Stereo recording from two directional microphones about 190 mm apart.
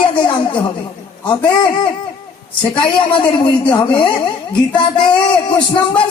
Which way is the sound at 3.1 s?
25° left (ahead or behind).